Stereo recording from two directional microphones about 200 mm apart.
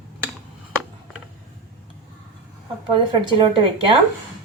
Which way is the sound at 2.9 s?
25° right (ahead or behind).